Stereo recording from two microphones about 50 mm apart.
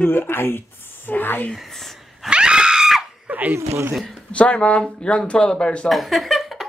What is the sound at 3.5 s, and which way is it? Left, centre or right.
Speech, right.